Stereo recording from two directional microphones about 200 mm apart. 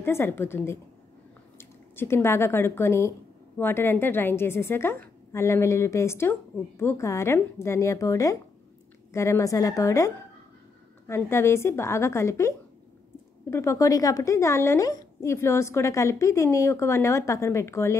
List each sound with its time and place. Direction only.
0.0 s a woman's voice: 10° left (ahead or behind)